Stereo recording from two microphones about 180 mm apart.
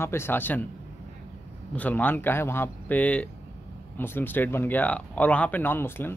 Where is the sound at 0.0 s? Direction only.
15° left (ahead or behind).